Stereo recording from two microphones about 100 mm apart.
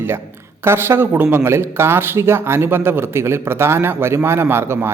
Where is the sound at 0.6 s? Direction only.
25° right (ahead or behind).